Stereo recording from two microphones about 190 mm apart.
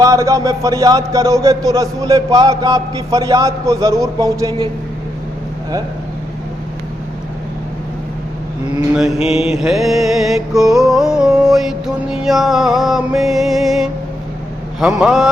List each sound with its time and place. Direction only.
0.0 s a man's voice: 15° right (ahead or behind)
9.3 s music: 5° right (ahead or behind)